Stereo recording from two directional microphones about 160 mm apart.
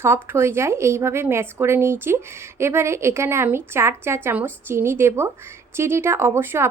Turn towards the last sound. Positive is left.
turn(degrees=-15)  # may be behind; listen again after turning